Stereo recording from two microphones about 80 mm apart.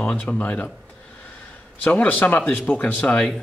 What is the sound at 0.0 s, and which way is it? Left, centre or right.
Speech, centre.